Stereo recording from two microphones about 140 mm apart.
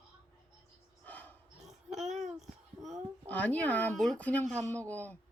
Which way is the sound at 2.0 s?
55° right (ahead or behind).